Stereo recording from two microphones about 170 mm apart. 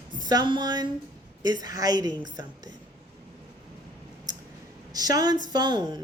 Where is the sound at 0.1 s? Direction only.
25° right (ahead or behind).